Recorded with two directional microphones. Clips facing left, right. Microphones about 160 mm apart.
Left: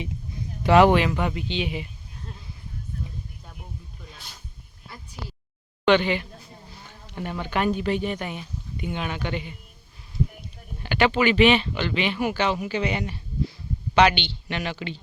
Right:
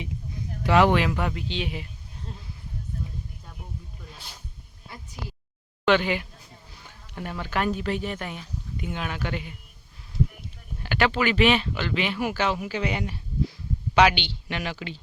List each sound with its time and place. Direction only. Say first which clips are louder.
0.6 s speech: left 4 dB; 20° left (ahead or behind)
0.9 s speech: left 2 dB; centre (ahead or behind)
5.8 s speech: left 2 dB; 5° right (ahead or behind)
10.8 s speech: left 3 dB; centre (ahead or behind)